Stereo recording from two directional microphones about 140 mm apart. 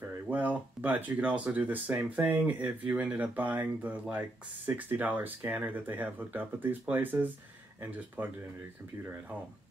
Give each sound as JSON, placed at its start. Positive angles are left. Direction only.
{"t": 0.3, "sound": "speech", "side_deg": -10}